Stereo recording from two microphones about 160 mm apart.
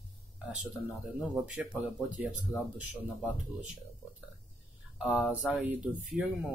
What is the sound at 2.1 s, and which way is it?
Speech, 10° right (ahead or behind).